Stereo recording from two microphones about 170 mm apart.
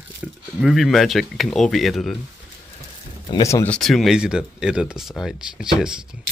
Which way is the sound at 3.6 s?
5° left (ahead or behind).